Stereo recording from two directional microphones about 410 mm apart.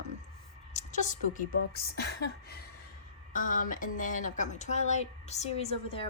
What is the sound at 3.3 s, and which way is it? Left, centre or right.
A woman's voice, centre.